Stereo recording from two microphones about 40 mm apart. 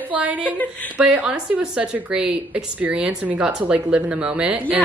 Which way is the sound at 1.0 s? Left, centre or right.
Right.